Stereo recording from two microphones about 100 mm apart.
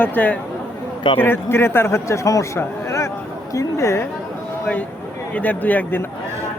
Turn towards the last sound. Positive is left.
turn(degrees=20)  # may be behind; listen again after turning